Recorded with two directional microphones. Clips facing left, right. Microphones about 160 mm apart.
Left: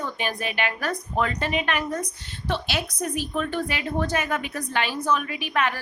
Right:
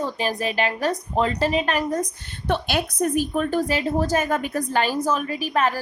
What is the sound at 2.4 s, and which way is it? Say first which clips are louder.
A woman's voice: right 4 dB; 50° right (ahead or behind).